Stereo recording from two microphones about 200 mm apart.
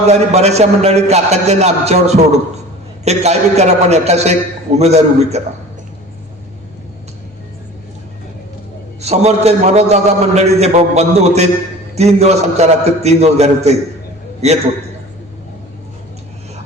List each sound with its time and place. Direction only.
0.1 s a man's voice: 35° right (ahead or behind)
9.0 s a man's voice: 35° right (ahead or behind)